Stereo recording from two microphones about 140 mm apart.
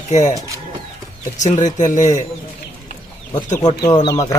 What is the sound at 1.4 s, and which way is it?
Speech, 60° left (ahead or behind).